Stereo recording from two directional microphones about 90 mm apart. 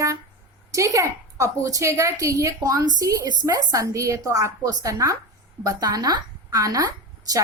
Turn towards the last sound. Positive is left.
turn(degrees=-40)  # may be behind; listen again after turning